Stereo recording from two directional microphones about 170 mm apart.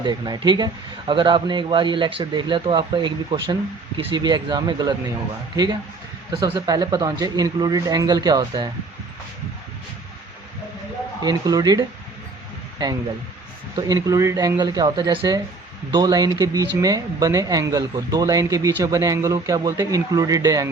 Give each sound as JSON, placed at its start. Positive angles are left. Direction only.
{"t": 0.0, "sound": "speech", "side_deg": -25}
{"t": 6.4, "sound": "speech", "side_deg": -20}
{"t": 11.2, "sound": "speech", "side_deg": -25}
{"t": 13.7, "sound": "speech", "side_deg": -20}